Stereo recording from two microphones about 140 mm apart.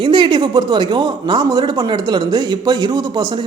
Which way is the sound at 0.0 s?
35° right (ahead or behind).